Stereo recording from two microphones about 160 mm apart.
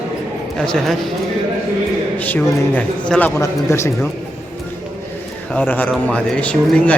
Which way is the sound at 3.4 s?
20° left (ahead or behind).